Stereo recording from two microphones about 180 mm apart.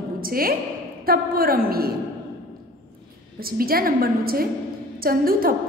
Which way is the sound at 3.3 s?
55° right (ahead or behind).